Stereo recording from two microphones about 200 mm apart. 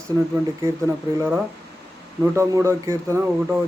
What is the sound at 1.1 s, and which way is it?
Speech, 10° right (ahead or behind).